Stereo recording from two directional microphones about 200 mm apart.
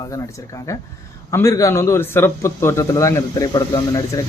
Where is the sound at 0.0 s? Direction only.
15° left (ahead or behind).